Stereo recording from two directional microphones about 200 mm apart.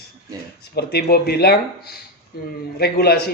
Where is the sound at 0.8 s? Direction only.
55° left (ahead or behind).